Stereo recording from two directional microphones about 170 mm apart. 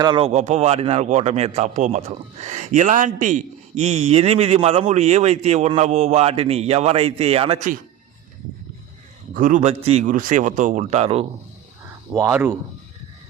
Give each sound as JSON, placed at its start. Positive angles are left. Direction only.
{"t": 0.0, "sound": "speech", "side_deg": -30}
{"t": 9.3, "sound": "a man's voice", "side_deg": -50}
{"t": 11.9, "sound": "speech", "side_deg": -15}